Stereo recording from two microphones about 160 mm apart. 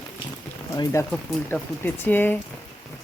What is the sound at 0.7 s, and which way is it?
Speech, 15° left (ahead or behind).